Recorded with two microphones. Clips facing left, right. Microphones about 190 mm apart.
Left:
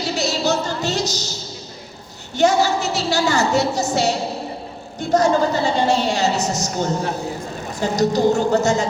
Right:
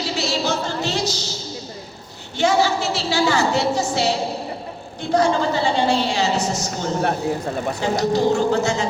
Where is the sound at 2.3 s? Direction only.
40° left (ahead or behind).